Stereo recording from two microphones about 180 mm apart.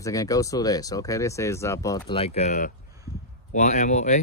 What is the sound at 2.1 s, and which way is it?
Speech, 35° left (ahead or behind).